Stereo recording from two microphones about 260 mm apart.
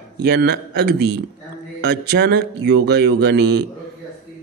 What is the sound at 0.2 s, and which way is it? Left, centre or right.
Speech, right.